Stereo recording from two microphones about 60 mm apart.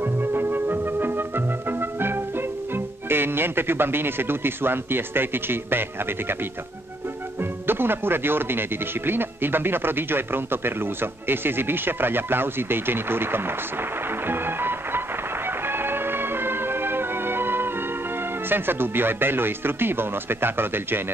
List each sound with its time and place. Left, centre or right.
0.0 s music: right
2.7 s speech: right
7.6 s speech: right
14.2 s music: right
18.5 s speech: right